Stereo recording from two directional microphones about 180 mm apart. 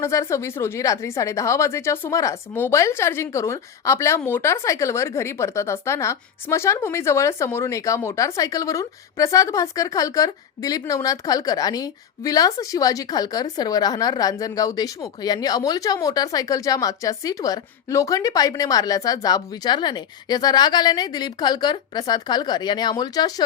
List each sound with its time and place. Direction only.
0.0 s a woman's voice: 15° left (ahead or behind)